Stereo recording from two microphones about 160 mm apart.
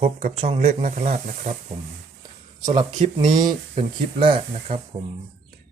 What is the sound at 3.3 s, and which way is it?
Speech, 25° right (ahead or behind).